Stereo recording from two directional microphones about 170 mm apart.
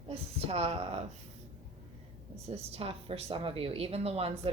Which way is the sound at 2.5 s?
35° right (ahead or behind).